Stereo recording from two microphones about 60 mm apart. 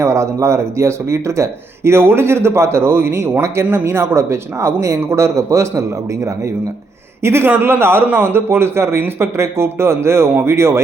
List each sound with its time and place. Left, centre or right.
0.0 s speech: right
7.2 s speech: right